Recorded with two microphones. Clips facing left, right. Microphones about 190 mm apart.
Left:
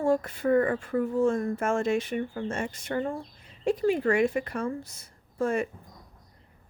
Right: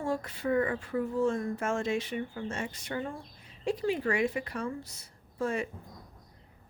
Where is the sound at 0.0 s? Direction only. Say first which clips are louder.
Left 7 dB; 50° left (ahead or behind).